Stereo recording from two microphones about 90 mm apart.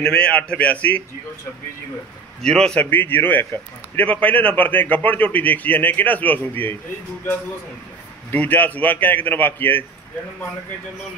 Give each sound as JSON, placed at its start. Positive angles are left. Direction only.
{"t": 0.0, "sound": "a man's voice", "side_deg": 10}
{"t": 2.4, "sound": "a man's voice", "side_deg": 10}
{"t": 8.3, "sound": "a man's voice", "side_deg": 20}